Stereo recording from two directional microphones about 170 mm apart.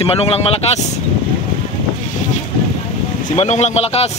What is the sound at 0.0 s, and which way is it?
Speech, 35° left (ahead or behind).